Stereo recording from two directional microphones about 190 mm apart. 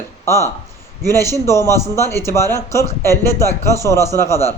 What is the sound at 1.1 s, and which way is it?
A man's voice, 15° left (ahead or behind).